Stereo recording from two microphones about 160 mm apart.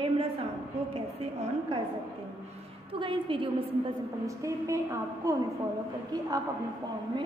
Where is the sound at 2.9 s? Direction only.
30° right (ahead or behind).